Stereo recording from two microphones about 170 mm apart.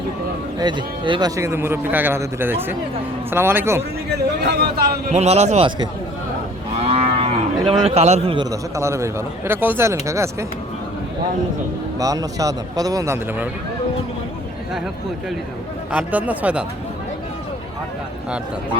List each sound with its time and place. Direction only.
0.6 s speech: 25° right (ahead or behind)
1.4 s a man's voice: 15° right (ahead or behind)
4.4 s a man's voice: 70° right (ahead or behind)
5.1 s a man's voice: 40° right (ahead or behind)
6.8 s cattle: 35° right (ahead or behind)
8.4 s a man's voice: 15° right (ahead or behind)
11.9 s speech: 20° right (ahead or behind)
15.9 s a man's voice: 10° right (ahead or behind)